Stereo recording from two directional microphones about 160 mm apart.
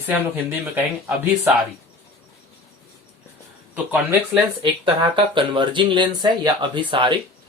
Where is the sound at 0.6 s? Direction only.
15° right (ahead or behind).